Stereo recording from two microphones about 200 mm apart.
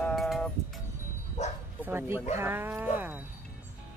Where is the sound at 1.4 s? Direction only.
35° left (ahead or behind).